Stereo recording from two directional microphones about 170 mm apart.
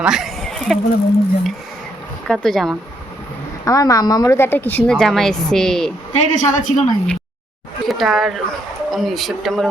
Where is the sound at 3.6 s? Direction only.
20° left (ahead or behind); by 5.9 s 5° left (ahead or behind).